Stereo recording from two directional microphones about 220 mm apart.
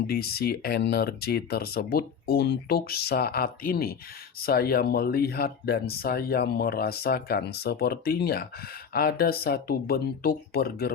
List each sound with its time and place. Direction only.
0.1 s speech: 45° left (ahead or behind)